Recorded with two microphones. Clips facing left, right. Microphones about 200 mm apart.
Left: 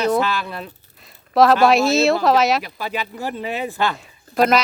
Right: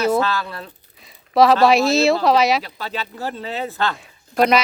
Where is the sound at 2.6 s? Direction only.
10° left (ahead or behind).